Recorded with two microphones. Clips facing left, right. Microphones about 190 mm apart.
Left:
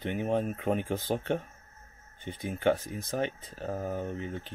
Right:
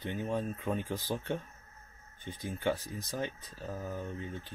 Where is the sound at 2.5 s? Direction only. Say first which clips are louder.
Left 6 dB; 60° left (ahead or behind).